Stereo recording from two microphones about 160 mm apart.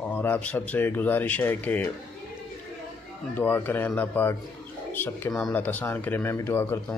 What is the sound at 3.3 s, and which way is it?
Speech, 10° left (ahead or behind).